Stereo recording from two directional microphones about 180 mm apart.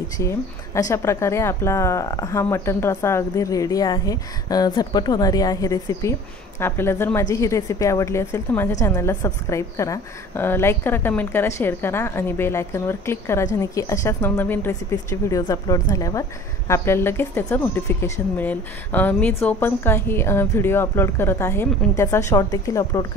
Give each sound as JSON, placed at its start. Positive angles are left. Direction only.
{"t": 0.2, "sound": "a woman's voice", "side_deg": 15}